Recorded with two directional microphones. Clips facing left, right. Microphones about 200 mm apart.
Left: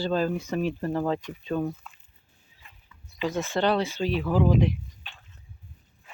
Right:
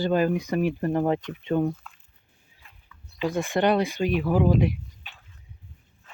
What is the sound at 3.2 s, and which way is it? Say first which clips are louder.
Speech: right 2 dB; 10° right (ahead or behind).